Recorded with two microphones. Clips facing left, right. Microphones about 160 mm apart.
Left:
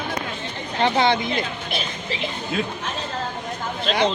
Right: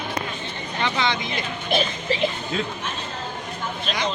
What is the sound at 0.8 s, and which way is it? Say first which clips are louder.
Speech: left 6 dB; 50° left (ahead or behind).